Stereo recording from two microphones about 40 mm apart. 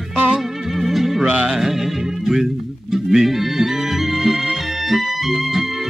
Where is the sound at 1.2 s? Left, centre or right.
Right.